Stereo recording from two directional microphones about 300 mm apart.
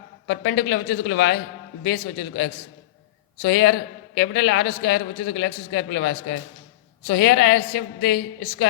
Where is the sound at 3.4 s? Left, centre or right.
Left.